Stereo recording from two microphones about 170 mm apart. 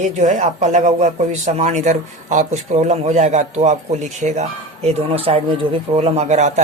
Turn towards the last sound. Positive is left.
turn(degrees=-45)  # may be behind; listen again after turning